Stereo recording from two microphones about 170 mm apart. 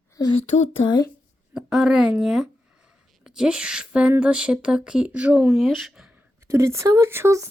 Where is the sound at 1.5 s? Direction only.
5° right (ahead or behind).